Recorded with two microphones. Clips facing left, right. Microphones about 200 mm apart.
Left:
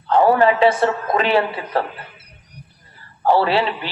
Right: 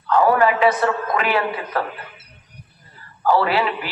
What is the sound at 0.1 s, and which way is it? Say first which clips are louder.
A man's voice: left 2 dB; 30° left (ahead or behind).